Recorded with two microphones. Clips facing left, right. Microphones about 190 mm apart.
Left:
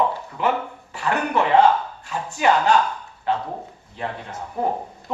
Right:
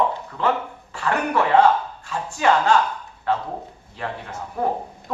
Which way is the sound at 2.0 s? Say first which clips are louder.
Even; 15° left (ahead or behind).